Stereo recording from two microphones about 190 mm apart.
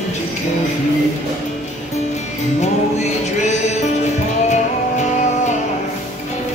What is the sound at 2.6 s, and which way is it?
Music, 35° left (ahead or behind).